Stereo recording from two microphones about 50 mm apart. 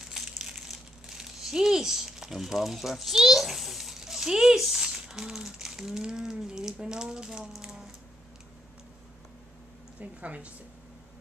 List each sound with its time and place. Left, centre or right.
0.0 s crumpling: centre
7.5 s typewriter: centre
9.9 s a woman's voice: right